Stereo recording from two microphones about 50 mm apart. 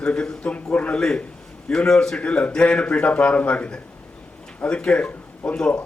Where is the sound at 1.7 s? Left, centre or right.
Centre.